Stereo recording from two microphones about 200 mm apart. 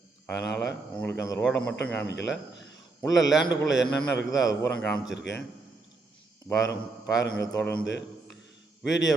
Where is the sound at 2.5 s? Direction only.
60° left (ahead or behind).